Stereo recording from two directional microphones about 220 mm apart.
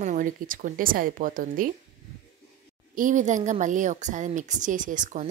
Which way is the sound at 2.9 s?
35° right (ahead or behind).